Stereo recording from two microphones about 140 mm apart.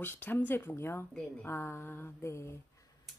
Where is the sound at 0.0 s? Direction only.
15° left (ahead or behind).